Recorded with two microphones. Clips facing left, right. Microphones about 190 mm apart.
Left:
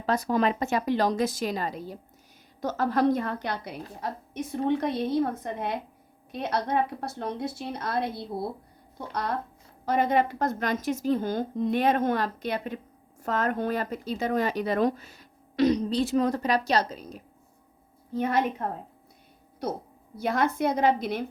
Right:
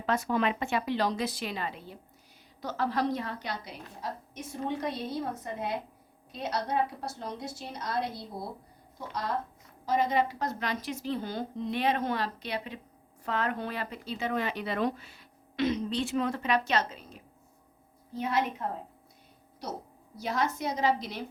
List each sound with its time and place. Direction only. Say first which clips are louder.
0.0 s a woman's voice: left 3 dB; 40° left (ahead or behind)
18.1 s a woman's voice: left 4 dB; 55° left (ahead or behind)
19.6 s a woman's voice: left 7 dB; 55° left (ahead or behind)